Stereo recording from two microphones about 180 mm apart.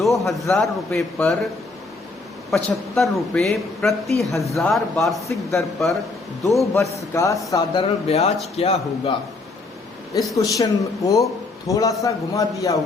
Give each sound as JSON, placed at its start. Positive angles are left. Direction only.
{"t": 0.0, "sound": "a man's voice", "side_deg": 0}
{"t": 2.5, "sound": "a man's voice", "side_deg": 0}
{"t": 7.1, "sound": "a man's voice", "side_deg": 15}
{"t": 10.3, "sound": "a man's voice", "side_deg": 20}